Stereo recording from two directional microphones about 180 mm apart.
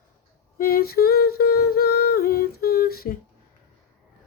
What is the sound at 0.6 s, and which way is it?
Humming, 55° left (ahead or behind).